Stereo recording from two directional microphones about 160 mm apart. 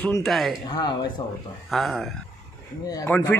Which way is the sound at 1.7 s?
Centre (ahead or behind).